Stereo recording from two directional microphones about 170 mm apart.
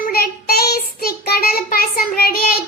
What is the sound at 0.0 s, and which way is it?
Child singing, 65° left (ahead or behind).